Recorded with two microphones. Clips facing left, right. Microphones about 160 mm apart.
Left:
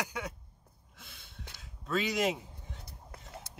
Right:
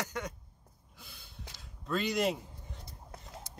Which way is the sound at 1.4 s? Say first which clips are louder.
Left 1 dB; centre (ahead or behind).